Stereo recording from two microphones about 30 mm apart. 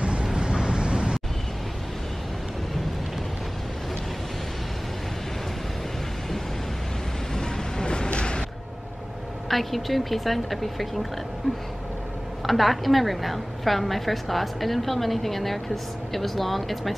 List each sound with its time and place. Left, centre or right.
0.2 s vehicle: right
7.3 s a sound: left
9.5 s a woman's voice: centre
12.4 s a woman's voice: centre